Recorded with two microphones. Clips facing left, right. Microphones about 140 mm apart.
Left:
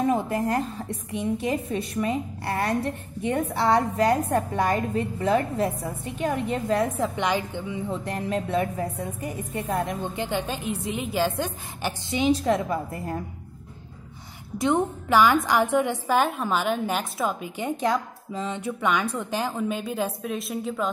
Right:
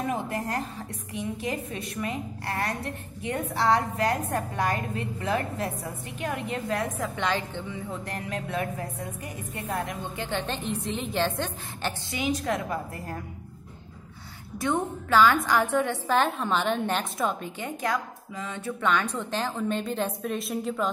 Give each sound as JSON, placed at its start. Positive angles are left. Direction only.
{"t": 0.0, "sound": "a woman's voice", "side_deg": 25}
{"t": 5.2, "sound": "a woman's voice", "side_deg": 30}
{"t": 7.2, "sound": "a woman's voice", "side_deg": 15}
{"t": 7.9, "sound": "a woman's voice", "side_deg": 25}
{"t": 10.1, "sound": "a woman's voice", "side_deg": 15}
{"t": 12.1, "sound": "a woman's voice", "side_deg": 25}
{"t": 14.6, "sound": "a woman's voice", "side_deg": 15}
{"t": 17.6, "sound": "a woman's voice", "side_deg": 20}